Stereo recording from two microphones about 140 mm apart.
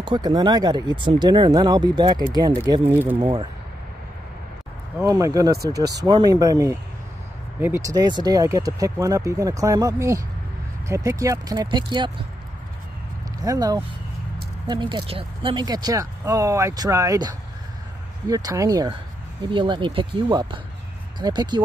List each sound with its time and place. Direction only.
0.0 s speech: 30° right (ahead or behind)
2.9 s speech: 15° right (ahead or behind)
3.2 s speech: 35° right (ahead or behind)
5.0 s speech: 25° right (ahead or behind)
13.4 s speech: 25° right (ahead or behind)